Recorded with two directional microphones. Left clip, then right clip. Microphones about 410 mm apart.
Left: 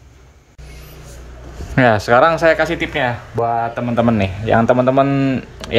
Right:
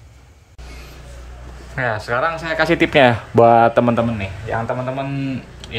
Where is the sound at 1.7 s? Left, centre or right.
Centre.